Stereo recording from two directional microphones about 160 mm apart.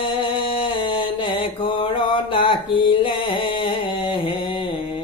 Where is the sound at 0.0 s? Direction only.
35° left (ahead or behind).